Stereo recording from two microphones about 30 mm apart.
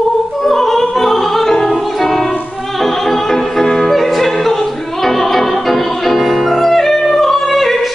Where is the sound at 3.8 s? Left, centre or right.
Centre.